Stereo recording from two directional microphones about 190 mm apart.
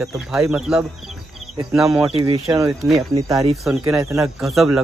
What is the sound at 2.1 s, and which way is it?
Speech, 25° right (ahead or behind).